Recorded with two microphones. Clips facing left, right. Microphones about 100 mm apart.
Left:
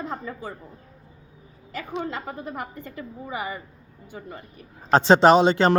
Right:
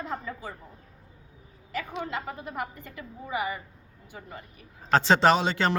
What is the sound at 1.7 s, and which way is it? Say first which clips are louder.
A woman's voice: left 2 dB; 35° left (ahead or behind).